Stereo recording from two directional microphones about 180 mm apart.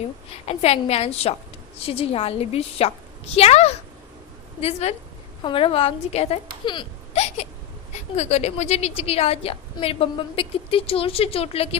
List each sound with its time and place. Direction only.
0.4 s a woman's voice: 35° left (ahead or behind)